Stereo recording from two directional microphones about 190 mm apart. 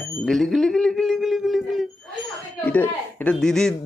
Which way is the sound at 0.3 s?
Centre (ahead or behind).